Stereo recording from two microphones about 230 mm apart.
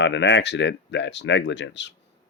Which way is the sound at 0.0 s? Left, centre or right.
Left.